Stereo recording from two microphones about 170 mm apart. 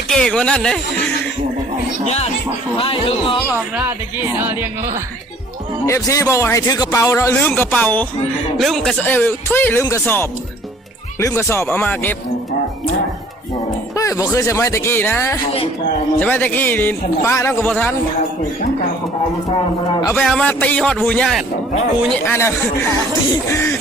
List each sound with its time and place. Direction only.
0.1 s speech: 5° left (ahead or behind)
2.0 s speech: 40° left (ahead or behind)
3.8 s speech: 10° right (ahead or behind)
5.8 s speech: 20° left (ahead or behind)
13.9 s music: 20° left (ahead or behind)
14.3 s speech: 20° left (ahead or behind)
20.1 s speech: 5° left (ahead or behind)
22.2 s speech: 15° left (ahead or behind)